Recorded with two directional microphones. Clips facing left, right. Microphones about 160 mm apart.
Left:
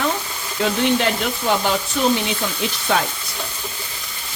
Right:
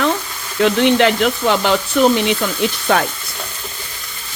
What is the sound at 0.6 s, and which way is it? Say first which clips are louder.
Speech: right 6 dB; 75° right (ahead or behind).